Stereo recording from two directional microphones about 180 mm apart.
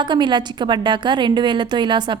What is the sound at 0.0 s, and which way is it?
A woman's voice, 25° right (ahead or behind).